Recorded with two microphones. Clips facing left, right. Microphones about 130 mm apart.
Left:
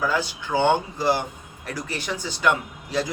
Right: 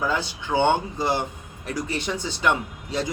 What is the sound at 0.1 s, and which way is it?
Speech, 25° right (ahead or behind).